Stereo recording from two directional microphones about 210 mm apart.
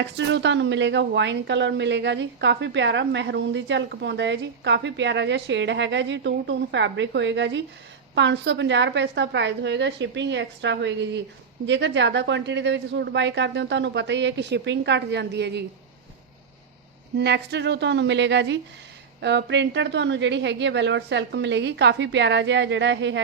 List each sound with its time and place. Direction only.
0.0 s a woman's voice: 55° right (ahead or behind)
17.2 s a woman's voice: 55° right (ahead or behind)